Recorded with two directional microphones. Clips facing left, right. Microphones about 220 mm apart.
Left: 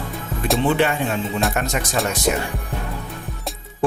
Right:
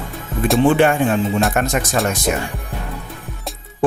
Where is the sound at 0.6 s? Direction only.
50° right (ahead or behind).